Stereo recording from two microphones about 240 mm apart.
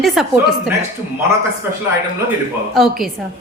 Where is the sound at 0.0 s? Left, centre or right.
Centre.